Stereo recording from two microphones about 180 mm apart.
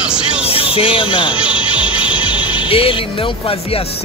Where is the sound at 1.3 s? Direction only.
5° right (ahead or behind).